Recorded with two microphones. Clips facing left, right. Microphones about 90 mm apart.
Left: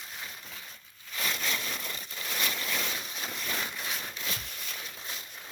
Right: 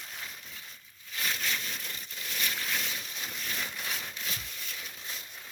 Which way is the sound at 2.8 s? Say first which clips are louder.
Left 3 dB; 40° left (ahead or behind).